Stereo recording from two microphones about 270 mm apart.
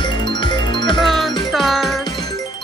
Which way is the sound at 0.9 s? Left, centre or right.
Centre.